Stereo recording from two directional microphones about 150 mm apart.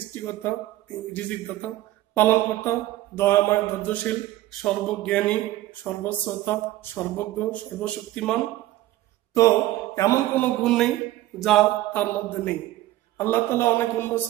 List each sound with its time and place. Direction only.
0.1 s mantra: 15° left (ahead or behind)
9.9 s mantra: 20° left (ahead or behind)
10.6 s speech: 5° left (ahead or behind)
11.3 s mantra: centre (ahead or behind)